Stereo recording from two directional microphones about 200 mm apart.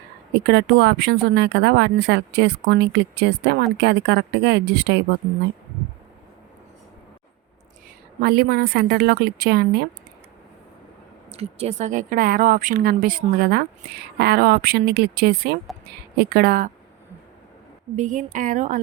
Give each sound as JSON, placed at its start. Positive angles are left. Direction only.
{"t": 0.3, "sound": "speech", "side_deg": -60}
{"t": 8.2, "sound": "a woman's voice", "side_deg": -50}
{"t": 11.3, "sound": "a woman's voice", "side_deg": -30}
{"t": 17.9, "sound": "speech", "side_deg": -40}